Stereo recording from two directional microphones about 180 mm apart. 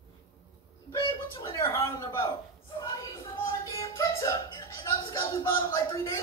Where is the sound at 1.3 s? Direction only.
25° left (ahead or behind).